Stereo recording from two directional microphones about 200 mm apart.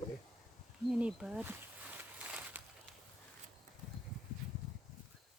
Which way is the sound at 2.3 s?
5° right (ahead or behind).